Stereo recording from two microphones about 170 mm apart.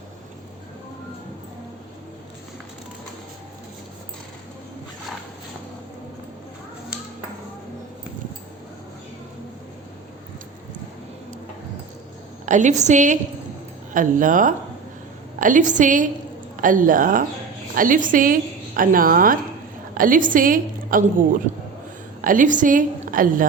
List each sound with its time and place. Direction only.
12.5 s a woman's voice: 45° right (ahead or behind)